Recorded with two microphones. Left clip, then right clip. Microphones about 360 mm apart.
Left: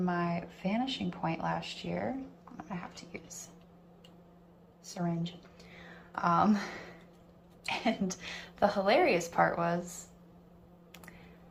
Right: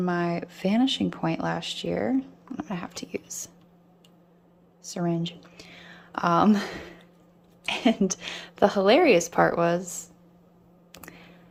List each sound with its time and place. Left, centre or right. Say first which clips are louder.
0.0 s a woman's voice: right 6 dB; centre
4.9 s a woman's voice: right 8 dB; right
10.9 s a sound: right 7 dB; centre